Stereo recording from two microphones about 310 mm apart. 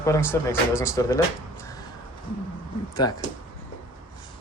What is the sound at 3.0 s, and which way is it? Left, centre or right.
Speech, centre.